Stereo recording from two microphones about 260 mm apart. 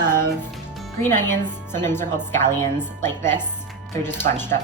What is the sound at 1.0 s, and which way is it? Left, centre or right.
A woman's voice, centre.